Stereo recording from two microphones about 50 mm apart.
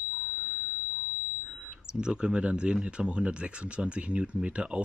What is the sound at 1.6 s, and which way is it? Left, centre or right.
Speech, centre.